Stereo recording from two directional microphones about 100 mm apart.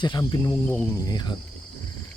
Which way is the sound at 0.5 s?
20° left (ahead or behind).